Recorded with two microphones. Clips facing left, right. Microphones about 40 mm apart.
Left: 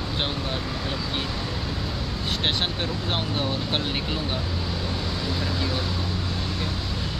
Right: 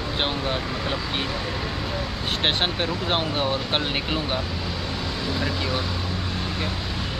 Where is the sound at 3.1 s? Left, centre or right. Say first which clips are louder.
Right 4 dB; right.